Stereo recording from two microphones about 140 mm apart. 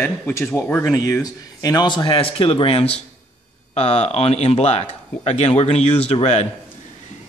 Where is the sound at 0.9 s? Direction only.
25° left (ahead or behind).